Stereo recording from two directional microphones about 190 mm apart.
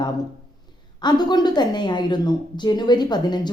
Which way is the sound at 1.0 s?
20° left (ahead or behind).